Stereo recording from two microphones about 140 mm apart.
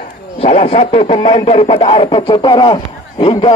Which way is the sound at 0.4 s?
40° left (ahead or behind).